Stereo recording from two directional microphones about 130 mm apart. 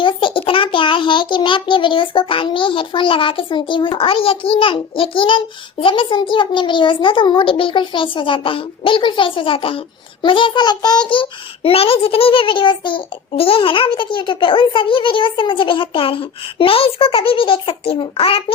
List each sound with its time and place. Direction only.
0.0 s a child's voice: 40° left (ahead or behind)